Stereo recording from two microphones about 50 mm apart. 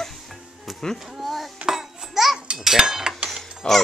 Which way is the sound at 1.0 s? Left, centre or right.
Centre.